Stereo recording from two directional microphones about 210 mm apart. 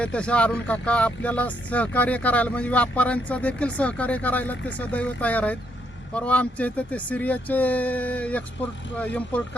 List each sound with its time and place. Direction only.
0.0 s speech: 5° left (ahead or behind)